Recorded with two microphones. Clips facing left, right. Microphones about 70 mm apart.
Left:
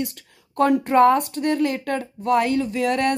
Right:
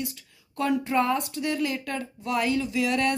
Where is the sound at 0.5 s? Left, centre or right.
Left.